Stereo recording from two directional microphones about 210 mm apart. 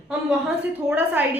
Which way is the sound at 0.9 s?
5° right (ahead or behind).